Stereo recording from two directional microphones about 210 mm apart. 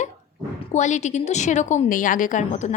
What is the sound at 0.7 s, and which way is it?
A woman's voice, 35° left (ahead or behind).